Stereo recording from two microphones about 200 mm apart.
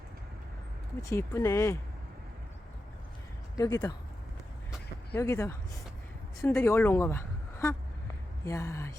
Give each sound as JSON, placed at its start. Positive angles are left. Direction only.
{"t": 1.0, "sound": "speech", "side_deg": 15}
{"t": 3.6, "sound": "speech", "side_deg": 15}
{"t": 5.1, "sound": "speech", "side_deg": 15}